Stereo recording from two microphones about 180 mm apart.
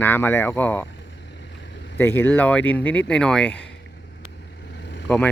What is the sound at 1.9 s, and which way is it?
Speech, 10° left (ahead or behind).